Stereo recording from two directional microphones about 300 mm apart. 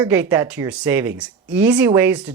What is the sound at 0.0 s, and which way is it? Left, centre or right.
Speech, centre.